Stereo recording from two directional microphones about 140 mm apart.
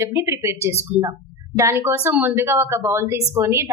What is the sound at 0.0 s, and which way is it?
A woman's voice, 20° right (ahead or behind).